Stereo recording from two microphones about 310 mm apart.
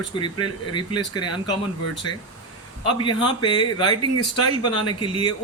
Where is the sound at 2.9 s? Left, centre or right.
Centre.